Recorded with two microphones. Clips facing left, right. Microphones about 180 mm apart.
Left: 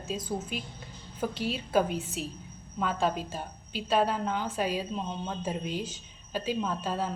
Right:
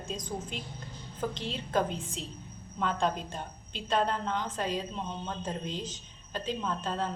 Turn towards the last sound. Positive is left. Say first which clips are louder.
# left 2 dB
turn(degrees=10)  # may be behind; listen again after turning